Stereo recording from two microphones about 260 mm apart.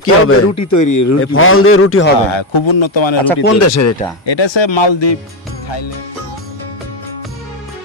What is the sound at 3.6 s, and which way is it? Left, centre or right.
Speech, left.